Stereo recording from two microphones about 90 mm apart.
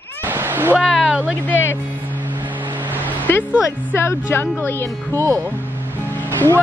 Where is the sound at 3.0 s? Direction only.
20° left (ahead or behind).